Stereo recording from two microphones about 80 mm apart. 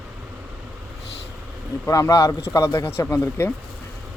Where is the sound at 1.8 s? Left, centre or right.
Left.